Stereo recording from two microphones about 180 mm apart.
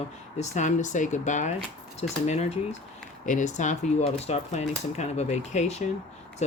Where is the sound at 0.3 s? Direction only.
40° left (ahead or behind).